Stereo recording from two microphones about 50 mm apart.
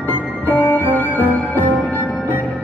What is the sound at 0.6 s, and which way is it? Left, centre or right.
Music, left.